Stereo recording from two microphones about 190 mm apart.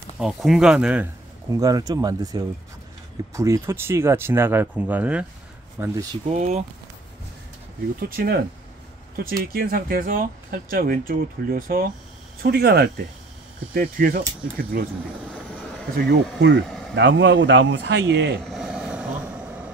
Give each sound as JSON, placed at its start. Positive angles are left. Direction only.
{"t": 0.2, "sound": "speech", "side_deg": 0}
{"t": 1.5, "sound": "speech", "side_deg": -20}
{"t": 6.3, "sound": "speech", "side_deg": -35}
{"t": 8.0, "sound": "speech", "side_deg": -50}
{"t": 16.1, "sound": "speech", "side_deg": -70}
{"t": 16.6, "sound": "a sound", "side_deg": 0}
{"t": 16.9, "sound": "speech", "side_deg": -70}
{"t": 18.4, "sound": "vehicle", "side_deg": 0}